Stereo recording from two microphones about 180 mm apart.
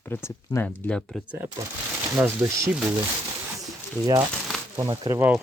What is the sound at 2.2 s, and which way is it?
Speech, 15° right (ahead or behind).